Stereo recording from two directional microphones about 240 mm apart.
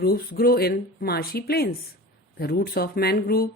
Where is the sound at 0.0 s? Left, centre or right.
Left.